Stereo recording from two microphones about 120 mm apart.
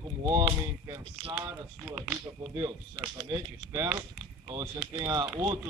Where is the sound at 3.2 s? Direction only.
30° right (ahead or behind).